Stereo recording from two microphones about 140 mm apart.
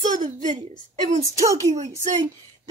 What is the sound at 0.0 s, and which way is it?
Speech, 65° right (ahead or behind).